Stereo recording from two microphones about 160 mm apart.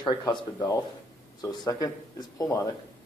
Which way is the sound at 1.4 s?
25° left (ahead or behind).